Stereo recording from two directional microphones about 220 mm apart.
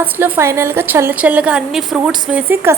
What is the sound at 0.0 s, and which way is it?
A woman's voice, 10° right (ahead or behind).